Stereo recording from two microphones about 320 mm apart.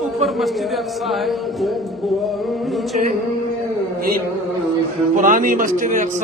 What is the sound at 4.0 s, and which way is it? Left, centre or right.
Music, right.